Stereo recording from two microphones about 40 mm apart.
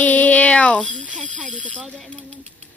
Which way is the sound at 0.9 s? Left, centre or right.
Right.